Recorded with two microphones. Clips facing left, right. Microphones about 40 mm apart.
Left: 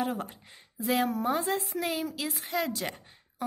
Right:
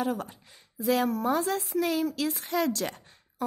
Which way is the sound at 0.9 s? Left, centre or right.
Left.